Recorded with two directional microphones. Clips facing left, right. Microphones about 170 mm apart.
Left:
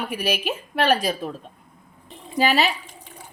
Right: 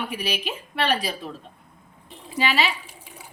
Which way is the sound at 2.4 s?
45° left (ahead or behind).